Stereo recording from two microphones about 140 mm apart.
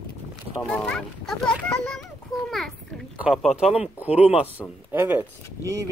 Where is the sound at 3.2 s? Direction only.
5° right (ahead or behind); by 5.9 s 20° right (ahead or behind).